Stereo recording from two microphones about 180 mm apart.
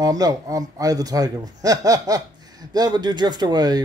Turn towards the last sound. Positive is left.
turn(degrees=-20)  # may be behind; listen again after turning